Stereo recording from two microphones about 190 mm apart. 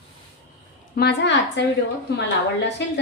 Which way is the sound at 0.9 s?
55° left (ahead or behind).